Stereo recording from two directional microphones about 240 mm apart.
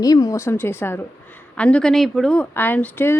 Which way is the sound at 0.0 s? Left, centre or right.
Centre.